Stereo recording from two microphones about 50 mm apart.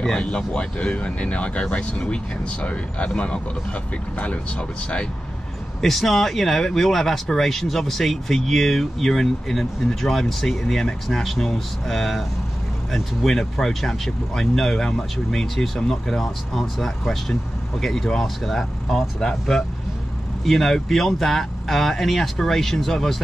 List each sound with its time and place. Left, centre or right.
0.0 s speech: centre
5.8 s speech: centre